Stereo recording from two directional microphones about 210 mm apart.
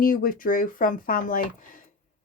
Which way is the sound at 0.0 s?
40° left (ahead or behind).